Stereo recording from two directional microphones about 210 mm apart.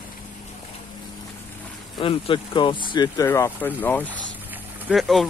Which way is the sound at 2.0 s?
25° left (ahead or behind).